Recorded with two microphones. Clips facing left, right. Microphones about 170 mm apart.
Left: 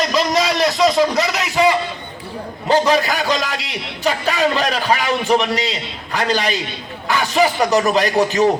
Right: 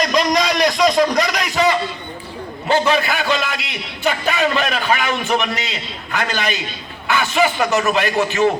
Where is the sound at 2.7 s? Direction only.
35° left (ahead or behind).